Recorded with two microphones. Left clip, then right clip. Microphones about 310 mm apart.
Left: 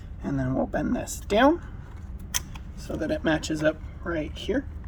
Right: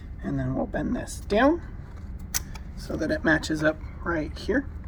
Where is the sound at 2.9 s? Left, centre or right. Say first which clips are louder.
Right 2 dB; centre.